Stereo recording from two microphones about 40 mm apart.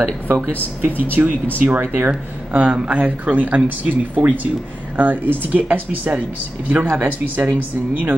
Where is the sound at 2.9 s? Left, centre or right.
Right.